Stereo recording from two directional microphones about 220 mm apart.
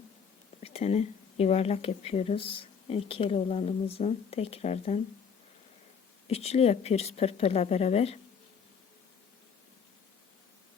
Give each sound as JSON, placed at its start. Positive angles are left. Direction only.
{"t": 0.6, "sound": "speech", "side_deg": 30}
{"t": 6.2, "sound": "speech", "side_deg": 30}